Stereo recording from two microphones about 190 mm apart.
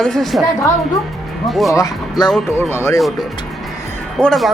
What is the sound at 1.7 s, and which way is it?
Speech, 20° left (ahead or behind).